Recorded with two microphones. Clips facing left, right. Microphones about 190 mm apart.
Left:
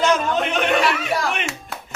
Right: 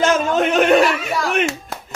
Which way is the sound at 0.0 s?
45° right (ahead or behind).